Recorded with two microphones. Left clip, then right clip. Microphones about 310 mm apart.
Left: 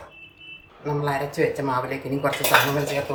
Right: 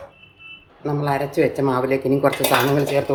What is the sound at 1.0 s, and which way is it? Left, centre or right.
Speech, right.